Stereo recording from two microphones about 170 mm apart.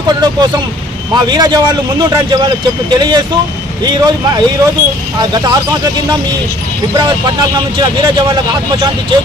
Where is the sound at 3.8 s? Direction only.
25° right (ahead or behind).